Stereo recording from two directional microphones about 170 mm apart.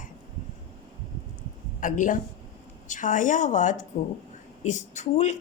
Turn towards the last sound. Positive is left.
turn(degrees=45)  # may be behind; listen again after turning